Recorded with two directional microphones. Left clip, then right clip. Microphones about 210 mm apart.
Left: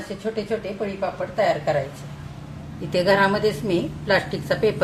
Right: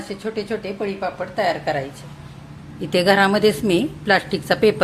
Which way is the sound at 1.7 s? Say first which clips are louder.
Even; 35° right (ahead or behind).